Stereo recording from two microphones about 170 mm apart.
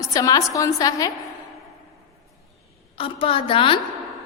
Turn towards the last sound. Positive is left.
turn(degrees=30)  # may be behind; listen again after turning